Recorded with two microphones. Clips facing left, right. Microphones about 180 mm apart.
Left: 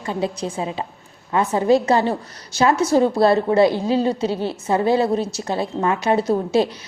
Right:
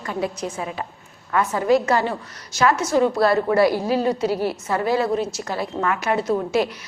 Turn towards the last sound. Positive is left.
turn(degrees=30)  # may be behind; listen again after turning